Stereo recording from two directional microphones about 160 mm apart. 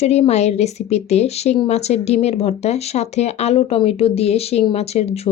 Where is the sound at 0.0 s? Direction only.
45° left (ahead or behind).